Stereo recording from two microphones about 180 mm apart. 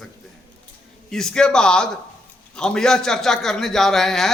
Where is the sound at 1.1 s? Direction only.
5° left (ahead or behind).